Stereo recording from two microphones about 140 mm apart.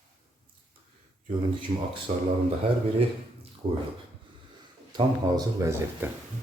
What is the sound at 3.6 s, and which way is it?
Speech, 40° right (ahead or behind).